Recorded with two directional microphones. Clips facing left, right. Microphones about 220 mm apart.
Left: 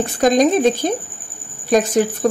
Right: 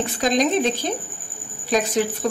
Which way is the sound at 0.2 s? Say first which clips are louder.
Left 6 dB; 50° left (ahead or behind).